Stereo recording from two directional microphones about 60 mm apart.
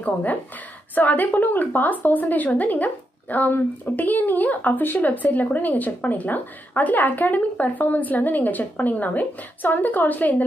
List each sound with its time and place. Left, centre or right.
0.0 s a woman's voice: left